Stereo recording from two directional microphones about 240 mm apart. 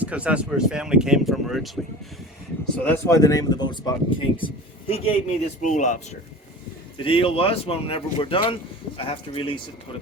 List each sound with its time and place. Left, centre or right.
0.0 s speech: centre; by 6.0 s left
7.0 s speech: left